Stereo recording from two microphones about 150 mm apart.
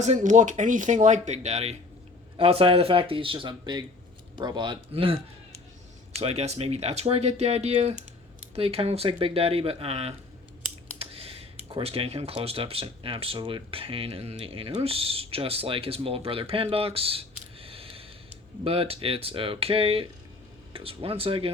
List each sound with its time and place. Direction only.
0.0 s speech: 55° right (ahead or behind); by 21.5 s 40° right (ahead or behind)